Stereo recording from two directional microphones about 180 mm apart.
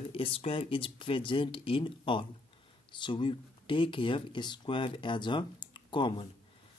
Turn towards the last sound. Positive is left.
turn(degrees=25)  # may be behind; listen again after turning